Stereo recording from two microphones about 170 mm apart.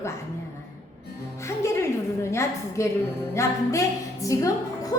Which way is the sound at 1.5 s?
15° left (ahead or behind).